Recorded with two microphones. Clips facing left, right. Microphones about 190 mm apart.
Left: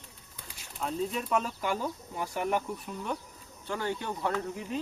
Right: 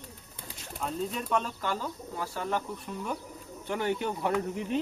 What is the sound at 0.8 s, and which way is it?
Speech, centre (ahead or behind).